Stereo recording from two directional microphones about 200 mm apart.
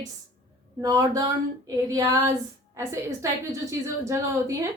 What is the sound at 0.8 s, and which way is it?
Female singing, 15° right (ahead or behind).